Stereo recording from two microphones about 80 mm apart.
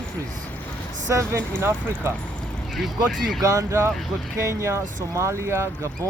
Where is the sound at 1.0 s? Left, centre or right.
Right.